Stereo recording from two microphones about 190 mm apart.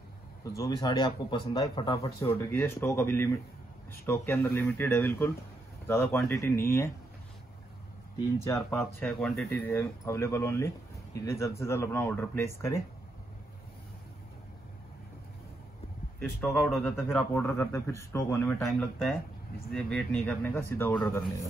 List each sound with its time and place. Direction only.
0.4 s speech: 20° left (ahead or behind)
8.5 s speech: 10° left (ahead or behind)
16.2 s speech: 5° left (ahead or behind)
17.3 s speech: 15° left (ahead or behind)